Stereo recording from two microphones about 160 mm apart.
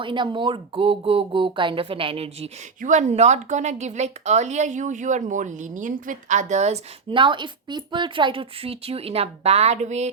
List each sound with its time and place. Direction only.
0.0 s a woman's voice: 30° right (ahead or behind); by 6.7 s 45° right (ahead or behind)
7.1 s a woman's voice: 30° right (ahead or behind)